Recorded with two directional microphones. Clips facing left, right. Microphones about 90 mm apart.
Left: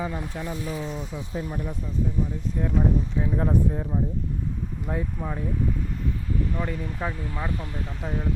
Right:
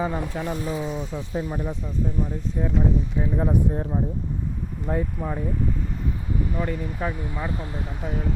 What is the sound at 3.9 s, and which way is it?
Speech, 25° right (ahead or behind).